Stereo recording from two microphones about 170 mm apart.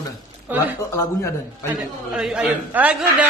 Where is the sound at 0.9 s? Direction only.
15° left (ahead or behind).